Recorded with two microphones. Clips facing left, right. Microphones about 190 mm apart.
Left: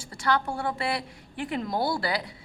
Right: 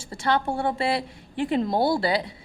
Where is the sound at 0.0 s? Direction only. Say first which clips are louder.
Right 2 dB; 25° right (ahead or behind).